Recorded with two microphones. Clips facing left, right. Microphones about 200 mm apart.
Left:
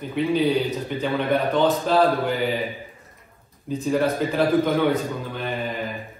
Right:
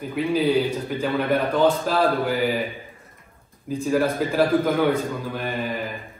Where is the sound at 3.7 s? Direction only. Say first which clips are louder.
Even; 5° right (ahead or behind).